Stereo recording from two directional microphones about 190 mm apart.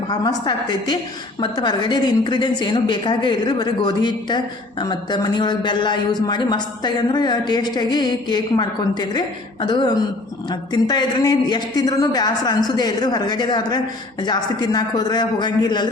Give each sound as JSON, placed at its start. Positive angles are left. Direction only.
{"t": 0.1, "sound": "a woman's voice", "side_deg": 20}